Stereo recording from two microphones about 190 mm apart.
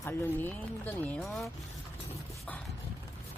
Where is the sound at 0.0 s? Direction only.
10° left (ahead or behind).